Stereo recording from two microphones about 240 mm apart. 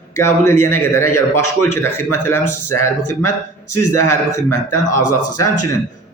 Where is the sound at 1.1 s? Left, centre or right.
Left.